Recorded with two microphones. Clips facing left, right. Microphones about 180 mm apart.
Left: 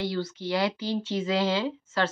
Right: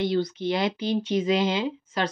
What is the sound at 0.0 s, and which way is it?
Speech, 20° right (ahead or behind).